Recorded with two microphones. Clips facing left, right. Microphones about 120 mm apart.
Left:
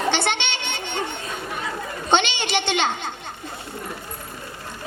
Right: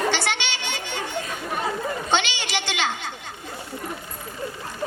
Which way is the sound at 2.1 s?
20° left (ahead or behind).